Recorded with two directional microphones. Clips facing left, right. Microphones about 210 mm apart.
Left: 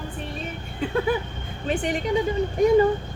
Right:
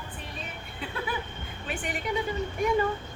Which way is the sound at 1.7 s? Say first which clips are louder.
Left 10 dB; 40° left (ahead or behind).